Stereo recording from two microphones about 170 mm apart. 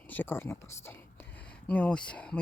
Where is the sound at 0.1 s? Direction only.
10° left (ahead or behind).